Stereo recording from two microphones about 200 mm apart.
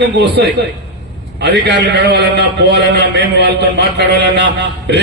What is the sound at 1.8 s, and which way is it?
A man's voice, 60° right (ahead or behind).